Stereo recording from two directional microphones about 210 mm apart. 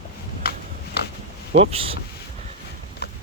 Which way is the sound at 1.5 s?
30° right (ahead or behind).